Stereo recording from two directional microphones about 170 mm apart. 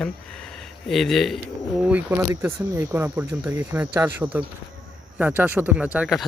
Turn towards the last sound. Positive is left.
turn(degrees=-5)  # may be behind; listen again after turning